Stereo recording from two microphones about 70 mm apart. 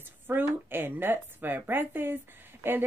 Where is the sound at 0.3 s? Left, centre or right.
Right.